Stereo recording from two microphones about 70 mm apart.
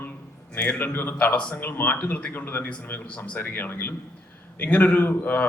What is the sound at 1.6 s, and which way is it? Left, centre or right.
A man's voice, left.